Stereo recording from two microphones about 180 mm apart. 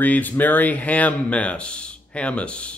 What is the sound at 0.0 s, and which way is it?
A man's voice, 10° left (ahead or behind).